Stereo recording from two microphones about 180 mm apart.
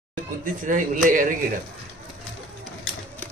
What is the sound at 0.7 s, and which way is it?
Speech, 45° right (ahead or behind).